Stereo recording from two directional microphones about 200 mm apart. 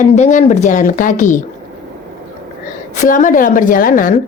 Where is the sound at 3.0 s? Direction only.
40° left (ahead or behind).